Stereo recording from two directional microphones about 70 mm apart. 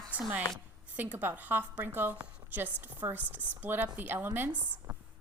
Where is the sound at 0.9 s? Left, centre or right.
Right.